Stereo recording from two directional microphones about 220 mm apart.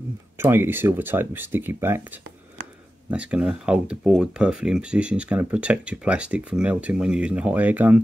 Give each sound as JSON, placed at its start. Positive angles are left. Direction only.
{"t": 0.4, "sound": "speech", "side_deg": -10}
{"t": 3.1, "sound": "speech", "side_deg": -5}